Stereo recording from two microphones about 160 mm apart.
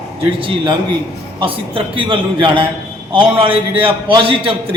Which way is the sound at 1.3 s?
30° right (ahead or behind).